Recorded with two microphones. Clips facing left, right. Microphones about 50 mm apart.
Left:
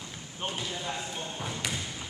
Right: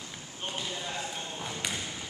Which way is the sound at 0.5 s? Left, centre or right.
Centre.